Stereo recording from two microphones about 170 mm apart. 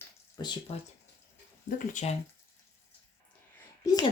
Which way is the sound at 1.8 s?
40° left (ahead or behind).